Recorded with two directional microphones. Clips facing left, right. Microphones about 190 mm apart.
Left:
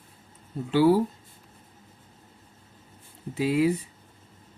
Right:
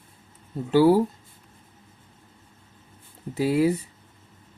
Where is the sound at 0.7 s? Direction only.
45° right (ahead or behind).